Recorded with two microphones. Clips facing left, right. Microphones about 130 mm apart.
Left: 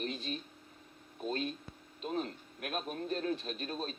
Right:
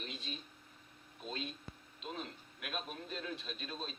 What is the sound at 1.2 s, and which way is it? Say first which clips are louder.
A man's voice: left 7 dB; 40° left (ahead or behind).